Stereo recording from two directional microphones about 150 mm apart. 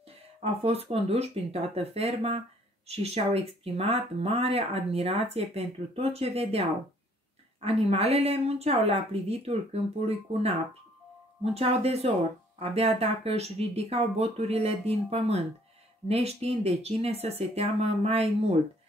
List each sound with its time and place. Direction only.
0.4 s speech: 40° right (ahead or behind)
7.6 s speech: 40° right (ahead or behind)
11.5 s speech: 45° right (ahead or behind)